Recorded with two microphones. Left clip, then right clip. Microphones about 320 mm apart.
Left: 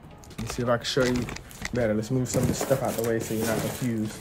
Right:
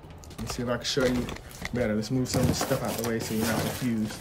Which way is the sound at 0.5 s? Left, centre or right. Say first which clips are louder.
Left 4 dB; centre.